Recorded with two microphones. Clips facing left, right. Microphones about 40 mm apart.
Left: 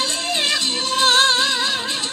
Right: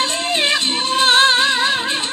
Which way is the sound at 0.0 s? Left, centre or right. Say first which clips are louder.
Right 3 dB; right.